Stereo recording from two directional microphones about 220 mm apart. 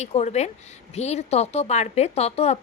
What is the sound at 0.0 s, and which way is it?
Speech, 30° left (ahead or behind).